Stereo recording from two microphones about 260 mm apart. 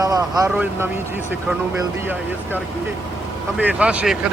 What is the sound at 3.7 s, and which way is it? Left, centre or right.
Speech, centre.